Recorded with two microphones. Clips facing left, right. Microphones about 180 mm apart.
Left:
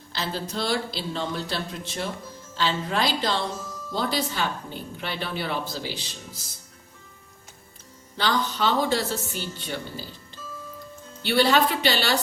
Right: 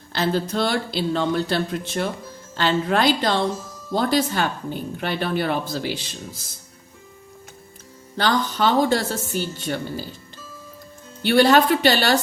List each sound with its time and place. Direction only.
0.1 s a woman's voice: 55° right (ahead or behind)
8.1 s a woman's voice: 50° right (ahead or behind)
11.2 s a woman's voice: 50° right (ahead or behind)